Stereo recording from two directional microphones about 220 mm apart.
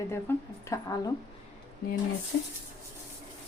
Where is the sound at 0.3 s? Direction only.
10° left (ahead or behind).